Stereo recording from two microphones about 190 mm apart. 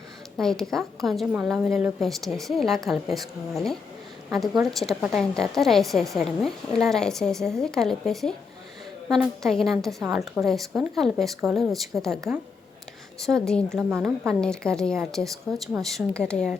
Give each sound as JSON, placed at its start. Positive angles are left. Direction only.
{"t": 0.3, "sound": "a woman's voice", "side_deg": 0}
{"t": 13.2, "sound": "a woman's voice", "side_deg": 5}